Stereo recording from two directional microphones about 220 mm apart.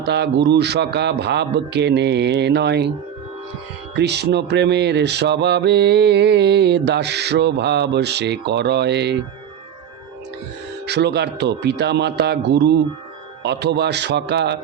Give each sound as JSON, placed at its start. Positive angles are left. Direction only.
{"t": 0.0, "sound": "mantra", "side_deg": -50}
{"t": 3.9, "sound": "mantra", "side_deg": -50}
{"t": 10.8, "sound": "mantra", "side_deg": -50}